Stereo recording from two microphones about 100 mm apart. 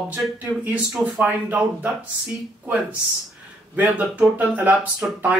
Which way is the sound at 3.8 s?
15° right (ahead or behind).